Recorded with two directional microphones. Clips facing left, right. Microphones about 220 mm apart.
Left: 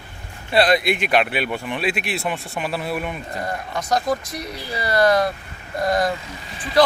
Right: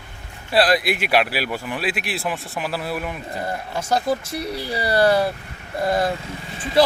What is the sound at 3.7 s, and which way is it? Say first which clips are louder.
Speech: even; 25° right (ahead or behind).